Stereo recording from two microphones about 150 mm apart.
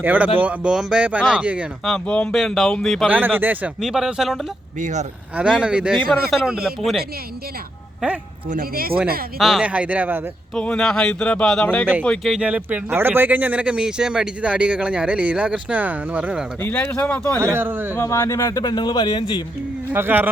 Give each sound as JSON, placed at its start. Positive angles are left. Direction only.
{"t": 0.0, "sound": "speech", "side_deg": -10}
{"t": 1.8, "sound": "speech", "side_deg": 5}
{"t": 3.1, "sound": "speech", "side_deg": -10}
{"t": 4.8, "sound": "speech", "side_deg": -55}
{"t": 5.4, "sound": "speech", "side_deg": -5}
{"t": 8.4, "sound": "speech", "side_deg": -70}
{"t": 9.4, "sound": "speech", "side_deg": -5}
{"t": 10.5, "sound": "speech", "side_deg": 5}
{"t": 16.6, "sound": "speech", "side_deg": 10}
{"t": 17.4, "sound": "speech", "side_deg": -15}
{"t": 17.9, "sound": "a man's voice", "side_deg": 20}
{"t": 19.9, "sound": "speech", "side_deg": -15}